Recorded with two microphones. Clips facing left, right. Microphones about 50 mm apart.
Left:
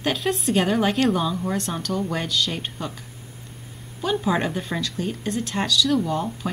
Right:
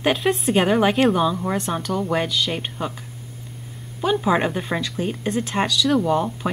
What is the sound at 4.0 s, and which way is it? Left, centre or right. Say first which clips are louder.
A woman's voice: right 3 dB; centre.